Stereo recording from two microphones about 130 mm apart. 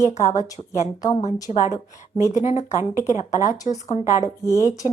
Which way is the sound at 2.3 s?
70° left (ahead or behind).